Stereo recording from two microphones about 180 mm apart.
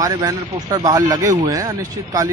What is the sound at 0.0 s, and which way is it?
Speech, 20° right (ahead or behind).